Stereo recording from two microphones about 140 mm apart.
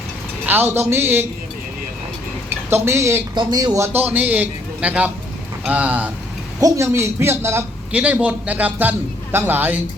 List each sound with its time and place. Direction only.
0.4 s a man's voice: 15° right (ahead or behind)
2.6 s a man's voice: 15° right (ahead or behind)
6.6 s a man's voice: 20° right (ahead or behind)